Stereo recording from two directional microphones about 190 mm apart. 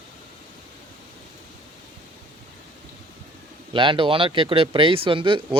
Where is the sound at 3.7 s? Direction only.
25° right (ahead or behind).